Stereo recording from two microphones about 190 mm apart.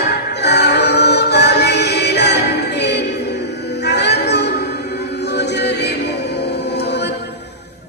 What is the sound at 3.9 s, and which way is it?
Music, 60° left (ahead or behind).